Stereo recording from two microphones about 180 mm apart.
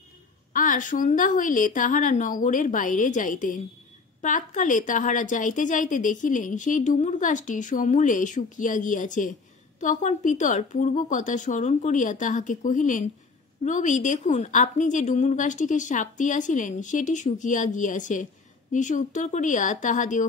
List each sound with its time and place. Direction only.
0.5 s a woman's voice: 45° left (ahead or behind)